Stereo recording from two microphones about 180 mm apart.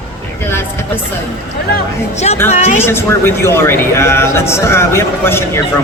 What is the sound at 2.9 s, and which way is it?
A man's voice, 15° left (ahead or behind).